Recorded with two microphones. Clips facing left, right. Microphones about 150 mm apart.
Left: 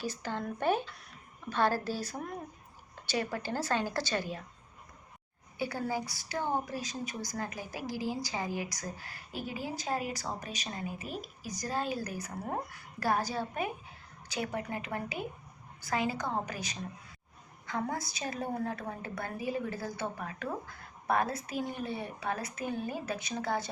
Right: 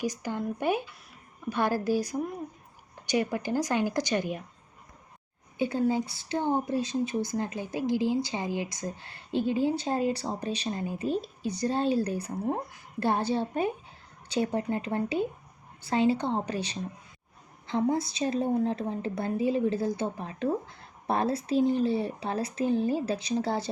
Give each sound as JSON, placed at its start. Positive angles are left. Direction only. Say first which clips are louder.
{"t": 0.0, "sound": "speech", "louder": "right 5 dB", "side_deg": -15}
{"t": 5.5, "sound": "a woman's voice", "louder": "right 7 dB", "side_deg": -20}